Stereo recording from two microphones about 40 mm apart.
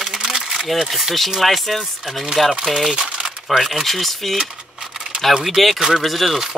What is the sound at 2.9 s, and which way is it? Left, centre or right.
Crumpling, centre.